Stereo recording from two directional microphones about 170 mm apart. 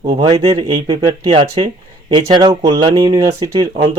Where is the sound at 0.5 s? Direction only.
35° right (ahead or behind).